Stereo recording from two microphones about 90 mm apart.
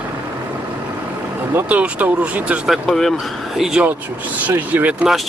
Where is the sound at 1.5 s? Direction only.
15° right (ahead or behind).